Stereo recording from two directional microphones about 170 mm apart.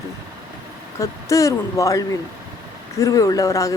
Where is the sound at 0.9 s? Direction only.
20° left (ahead or behind).